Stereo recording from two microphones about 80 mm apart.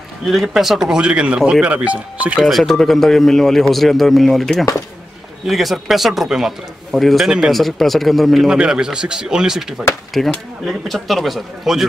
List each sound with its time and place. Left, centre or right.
0.2 s speech: centre
2.4 s a man's voice: centre